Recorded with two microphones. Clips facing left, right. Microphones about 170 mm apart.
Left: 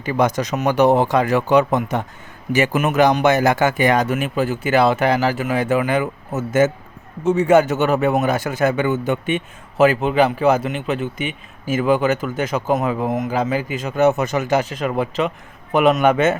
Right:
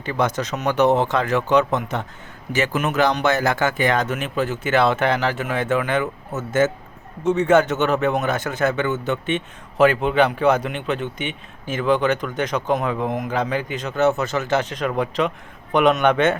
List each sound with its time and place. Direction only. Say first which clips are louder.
0.0 s a man's voice: left 4 dB; 10° left (ahead or behind)
7.3 s a man's voice: left 2 dB; 10° left (ahead or behind)